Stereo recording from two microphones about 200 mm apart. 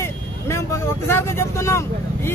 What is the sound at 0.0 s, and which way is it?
Speech, 15° left (ahead or behind).